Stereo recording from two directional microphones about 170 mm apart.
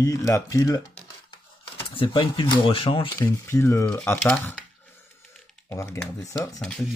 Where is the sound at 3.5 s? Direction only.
15° left (ahead or behind).